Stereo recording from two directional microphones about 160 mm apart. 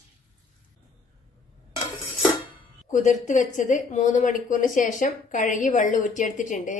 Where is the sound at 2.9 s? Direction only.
50° left (ahead or behind).